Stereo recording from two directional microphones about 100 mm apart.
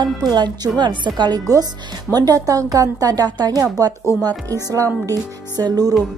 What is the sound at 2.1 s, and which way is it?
A woman's voice, 40° right (ahead or behind).